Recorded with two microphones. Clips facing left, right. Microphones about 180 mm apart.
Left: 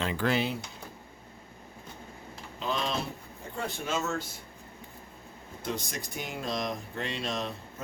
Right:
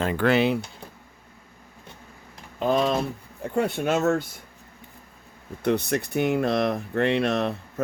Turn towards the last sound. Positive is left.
turn(degrees=-65)  # may be behind; listen again after turning